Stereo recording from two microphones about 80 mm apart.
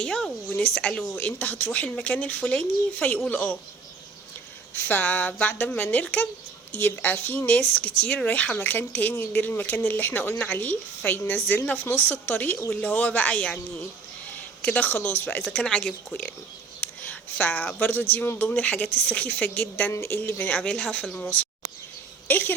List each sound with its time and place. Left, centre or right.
0.0 s speech: centre
4.7 s speech: left
14.6 s speech: centre
15.4 s speech: centre
16.8 s a sound: centre
17.7 s speech: left
19.9 s speech: left
20.2 s speech: centre